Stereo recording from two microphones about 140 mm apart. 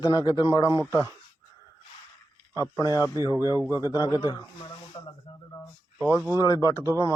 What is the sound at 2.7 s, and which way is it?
A man's voice, 25° left (ahead or behind).